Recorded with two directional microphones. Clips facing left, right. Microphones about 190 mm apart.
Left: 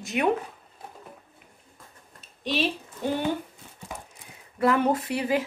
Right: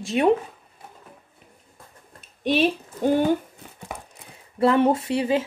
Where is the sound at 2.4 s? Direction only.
50° right (ahead or behind).